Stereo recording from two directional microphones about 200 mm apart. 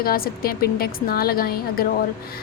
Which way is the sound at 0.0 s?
50° left (ahead or behind).